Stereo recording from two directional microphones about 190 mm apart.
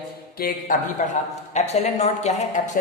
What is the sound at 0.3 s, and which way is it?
Speech, 50° left (ahead or behind).